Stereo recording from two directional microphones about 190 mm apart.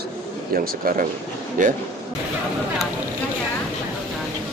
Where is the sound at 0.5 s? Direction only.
50° right (ahead or behind).